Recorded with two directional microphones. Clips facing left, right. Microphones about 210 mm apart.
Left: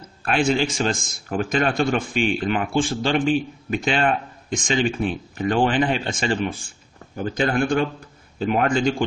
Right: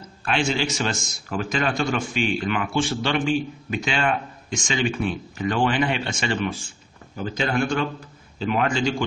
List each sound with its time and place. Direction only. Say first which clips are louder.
0.2 s a man's voice: left 3 dB; 55° left (ahead or behind); by 6.5 s 35° left (ahead or behind)
7.2 s a man's voice: left 3 dB; 50° left (ahead or behind)